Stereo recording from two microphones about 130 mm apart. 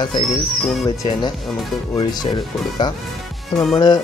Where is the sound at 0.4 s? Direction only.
Centre (ahead or behind).